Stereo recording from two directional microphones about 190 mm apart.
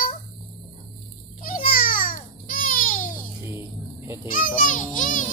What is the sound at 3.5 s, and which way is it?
Goose, 15° right (ahead or behind).